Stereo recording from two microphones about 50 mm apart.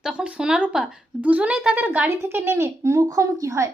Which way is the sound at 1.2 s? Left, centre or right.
Right.